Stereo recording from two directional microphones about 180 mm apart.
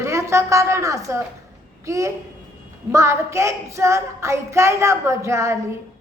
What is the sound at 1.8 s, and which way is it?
Speech, 15° right (ahead or behind).